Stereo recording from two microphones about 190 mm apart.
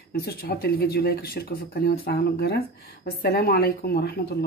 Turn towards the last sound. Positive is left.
turn(degrees=55)  # may be behind; listen again after turning